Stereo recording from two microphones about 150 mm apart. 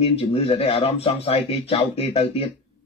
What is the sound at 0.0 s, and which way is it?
Speech, 40° left (ahead or behind).